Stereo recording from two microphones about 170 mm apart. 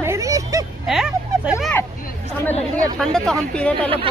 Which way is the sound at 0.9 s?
5° right (ahead or behind).